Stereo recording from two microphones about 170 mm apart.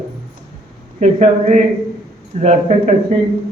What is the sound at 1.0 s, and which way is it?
A man's voice, 45° right (ahead or behind).